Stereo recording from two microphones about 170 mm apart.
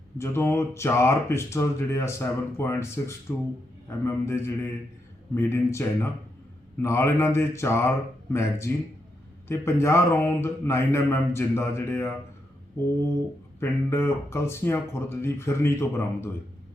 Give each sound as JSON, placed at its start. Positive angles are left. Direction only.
{"t": 0.2, "sound": "speech", "side_deg": 15}
{"t": 13.6, "sound": "speech", "side_deg": 15}